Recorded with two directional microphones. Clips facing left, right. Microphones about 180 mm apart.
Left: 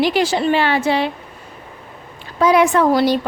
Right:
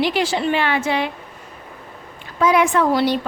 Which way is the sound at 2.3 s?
35° left (ahead or behind).